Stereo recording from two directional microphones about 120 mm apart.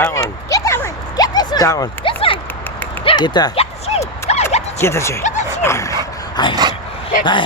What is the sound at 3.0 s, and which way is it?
Speech, 40° left (ahead or behind).